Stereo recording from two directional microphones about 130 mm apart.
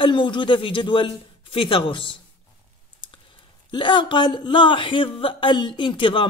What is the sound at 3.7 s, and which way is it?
Speech, 40° left (ahead or behind).